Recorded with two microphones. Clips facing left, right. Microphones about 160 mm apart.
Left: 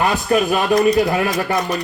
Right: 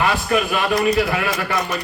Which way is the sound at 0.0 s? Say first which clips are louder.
Left 2 dB; 40° left (ahead or behind).